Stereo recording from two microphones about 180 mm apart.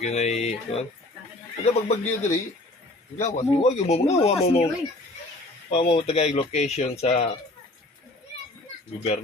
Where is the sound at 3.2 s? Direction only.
40° left (ahead or behind).